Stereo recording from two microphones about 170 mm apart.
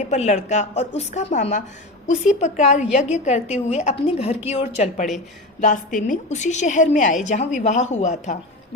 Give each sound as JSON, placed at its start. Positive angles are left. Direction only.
{"t": 0.1, "sound": "a woman's voice", "side_deg": 45}
{"t": 5.5, "sound": "a woman's voice", "side_deg": 50}